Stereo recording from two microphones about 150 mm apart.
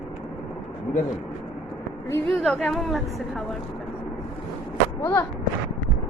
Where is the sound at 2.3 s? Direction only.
Centre (ahead or behind).